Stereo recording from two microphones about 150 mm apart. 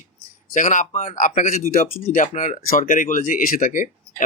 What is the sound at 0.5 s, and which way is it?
Speech, 60° left (ahead or behind).